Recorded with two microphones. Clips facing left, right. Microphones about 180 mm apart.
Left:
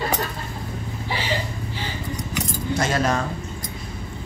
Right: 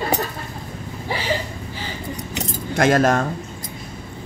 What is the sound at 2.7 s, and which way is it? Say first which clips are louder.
Speech: right 7 dB; 50° right (ahead or behind).